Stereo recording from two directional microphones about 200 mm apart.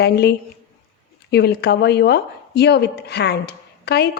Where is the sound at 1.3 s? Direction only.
55° left (ahead or behind).